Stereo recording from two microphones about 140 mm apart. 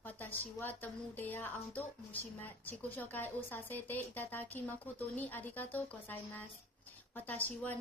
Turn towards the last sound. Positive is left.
turn(degrees=10)  # may be behind; listen again after turning